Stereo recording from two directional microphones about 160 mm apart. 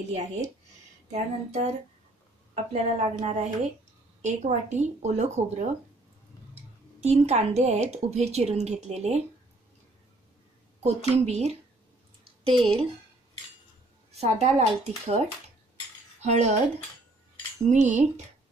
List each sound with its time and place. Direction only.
1.1 s a woman's voice: 45° right (ahead or behind)
7.0 s a woman's voice: 40° right (ahead or behind)
10.8 s a woman's voice: 45° right (ahead or behind)
14.1 s speech: 40° right (ahead or behind)
17.6 s a woman's voice: 50° right (ahead or behind)